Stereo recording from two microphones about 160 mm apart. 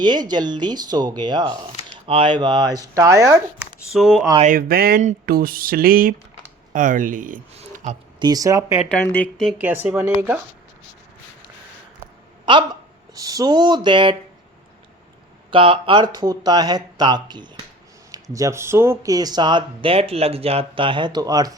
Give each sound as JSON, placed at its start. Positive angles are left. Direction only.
{"t": 0.0, "sound": "speech", "side_deg": -25}
{"t": 3.9, "sound": "speech", "side_deg": 0}
{"t": 4.5, "sound": "speech", "side_deg": -70}
{"t": 7.5, "sound": "a sound", "side_deg": -40}
{"t": 8.2, "sound": "speech", "side_deg": -25}
{"t": 8.9, "sound": "speech", "side_deg": 10}
{"t": 9.4, "sound": "speech", "side_deg": -5}
{"t": 12.5, "sound": "speech", "side_deg": -30}
{"t": 15.4, "sound": "speech", "side_deg": -30}